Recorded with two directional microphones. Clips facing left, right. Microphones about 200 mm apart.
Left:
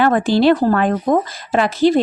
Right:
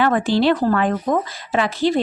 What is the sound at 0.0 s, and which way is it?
Speech, 45° left (ahead or behind).